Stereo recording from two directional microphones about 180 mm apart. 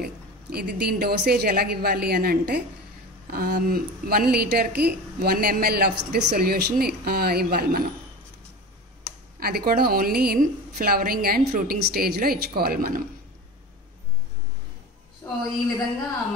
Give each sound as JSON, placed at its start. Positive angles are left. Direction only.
{"t": 0.0, "sound": "a woman's voice", "side_deg": -60}
{"t": 9.4, "sound": "a woman's voice", "side_deg": -60}
{"t": 15.2, "sound": "a woman's voice", "side_deg": 15}